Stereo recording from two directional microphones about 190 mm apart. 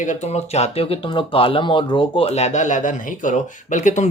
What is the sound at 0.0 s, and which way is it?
Speech, 40° left (ahead or behind).